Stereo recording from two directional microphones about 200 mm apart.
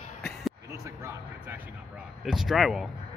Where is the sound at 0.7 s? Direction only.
15° right (ahead or behind).